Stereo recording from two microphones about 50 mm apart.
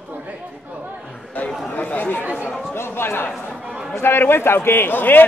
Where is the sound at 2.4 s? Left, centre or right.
Left.